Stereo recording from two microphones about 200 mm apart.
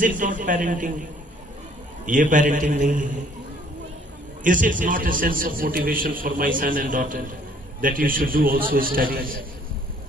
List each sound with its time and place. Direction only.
0.2 s a man's voice: 40° right (ahead or behind)
2.0 s a man's voice: 40° right (ahead or behind)
4.4 s a man's voice: 40° right (ahead or behind)